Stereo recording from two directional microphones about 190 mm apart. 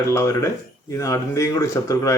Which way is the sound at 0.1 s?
15° left (ahead or behind).